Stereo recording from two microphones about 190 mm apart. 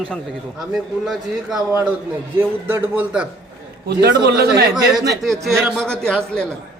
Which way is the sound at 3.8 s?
60° right (ahead or behind).